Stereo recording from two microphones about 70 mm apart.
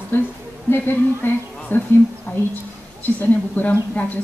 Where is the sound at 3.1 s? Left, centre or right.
Left.